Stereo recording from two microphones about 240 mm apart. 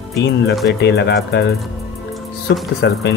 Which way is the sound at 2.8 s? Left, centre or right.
Left.